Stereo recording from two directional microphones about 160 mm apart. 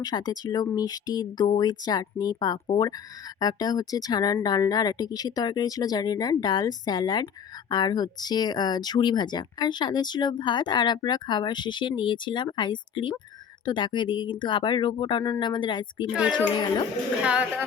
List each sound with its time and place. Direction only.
0.0 s speech: 25° left (ahead or behind)